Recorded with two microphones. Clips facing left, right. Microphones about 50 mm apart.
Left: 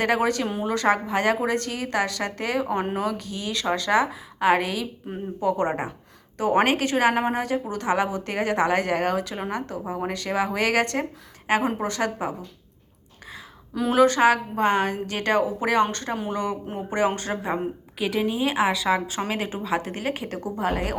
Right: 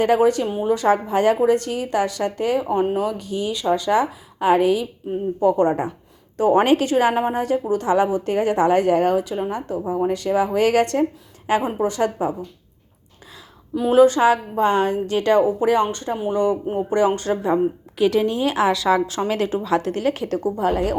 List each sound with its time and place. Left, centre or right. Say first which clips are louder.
0.0 s a woman's voice: right 6 dB; left
5.5 s speech: right 6 dB; left
6.3 s a woman's voice: right 5 dB; left
13.9 s a woman's voice: right 4 dB; left
17.9 s a woman's voice: right 6 dB; centre; by 20.4 s left
20.6 s a woman's voice: right 4 dB; left